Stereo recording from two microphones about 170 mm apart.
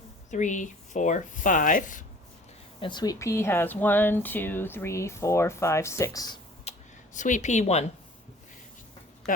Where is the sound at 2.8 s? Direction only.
25° left (ahead or behind).